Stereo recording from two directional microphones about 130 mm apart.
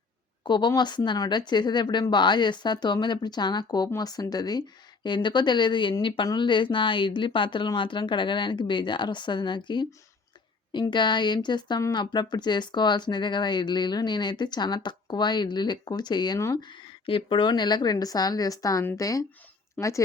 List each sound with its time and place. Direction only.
0.4 s a woman's voice: 35° left (ahead or behind)
16.6 s speech: 40° left (ahead or behind); by 20.0 s 25° left (ahead or behind)